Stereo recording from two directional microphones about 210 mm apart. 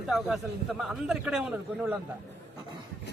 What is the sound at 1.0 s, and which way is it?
Speech, 5° right (ahead or behind).